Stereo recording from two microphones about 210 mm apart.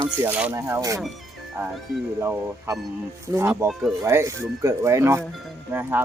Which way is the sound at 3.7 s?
Centre (ahead or behind).